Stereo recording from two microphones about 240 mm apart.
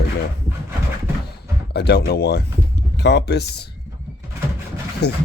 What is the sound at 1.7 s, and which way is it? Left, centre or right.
Speech, left.